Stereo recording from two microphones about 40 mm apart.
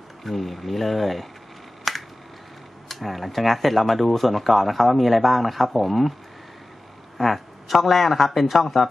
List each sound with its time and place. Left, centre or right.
0.2 s speech: centre
1.9 s camera: centre
2.9 s speech: centre
7.2 s speech: centre